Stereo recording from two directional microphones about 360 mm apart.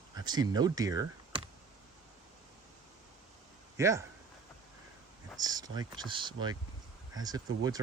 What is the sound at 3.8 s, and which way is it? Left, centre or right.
Speech, centre.